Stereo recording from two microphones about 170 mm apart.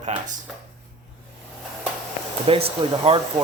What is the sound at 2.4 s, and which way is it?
Speech, 35° right (ahead or behind).